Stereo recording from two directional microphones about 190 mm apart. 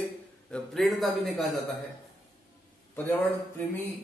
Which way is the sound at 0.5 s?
Centre (ahead or behind).